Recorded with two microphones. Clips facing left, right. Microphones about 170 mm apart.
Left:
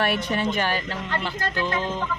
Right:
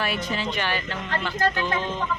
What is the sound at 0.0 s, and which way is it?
Speech, 60° left (ahead or behind).